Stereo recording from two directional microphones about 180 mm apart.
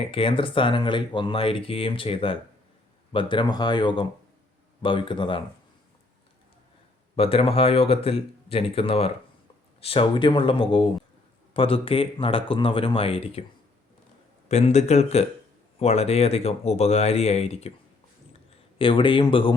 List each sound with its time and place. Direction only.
0.0 s speech: 30° left (ahead or behind)
7.2 s speech: 30° left (ahead or behind)
14.4 s speech: 40° left (ahead or behind)